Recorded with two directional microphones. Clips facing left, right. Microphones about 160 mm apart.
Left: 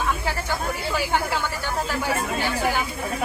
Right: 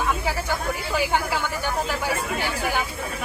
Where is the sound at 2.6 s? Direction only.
15° left (ahead or behind).